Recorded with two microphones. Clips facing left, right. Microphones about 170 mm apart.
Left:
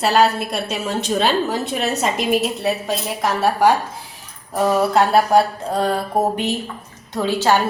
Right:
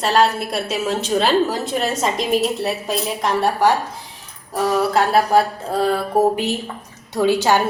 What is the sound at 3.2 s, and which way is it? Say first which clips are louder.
Speech: left 1 dB; 5° left (ahead or behind).